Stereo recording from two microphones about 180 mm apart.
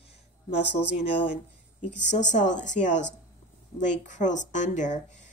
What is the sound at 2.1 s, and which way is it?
A woman's voice, 45° left (ahead or behind).